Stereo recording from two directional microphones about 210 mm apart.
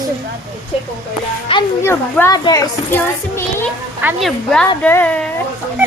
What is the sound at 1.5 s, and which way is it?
Speech, 25° left (ahead or behind).